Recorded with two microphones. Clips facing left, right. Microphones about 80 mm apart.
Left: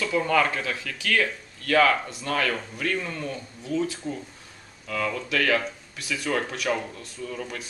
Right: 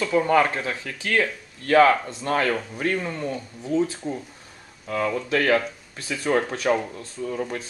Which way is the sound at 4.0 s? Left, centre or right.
Centre.